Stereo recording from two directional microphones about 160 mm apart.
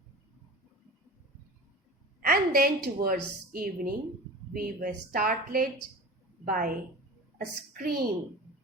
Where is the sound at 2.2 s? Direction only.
70° right (ahead or behind).